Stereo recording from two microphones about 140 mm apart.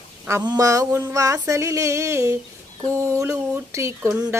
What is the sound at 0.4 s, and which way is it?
A woman's voice, 25° right (ahead or behind).